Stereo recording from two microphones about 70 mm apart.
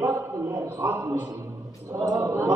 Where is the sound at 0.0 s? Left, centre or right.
Right.